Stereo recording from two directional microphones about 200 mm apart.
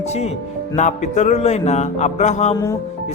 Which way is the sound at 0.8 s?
35° left (ahead or behind).